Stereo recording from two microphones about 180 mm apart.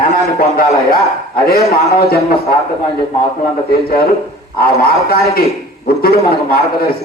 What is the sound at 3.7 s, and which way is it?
A man's voice, 55° left (ahead or behind).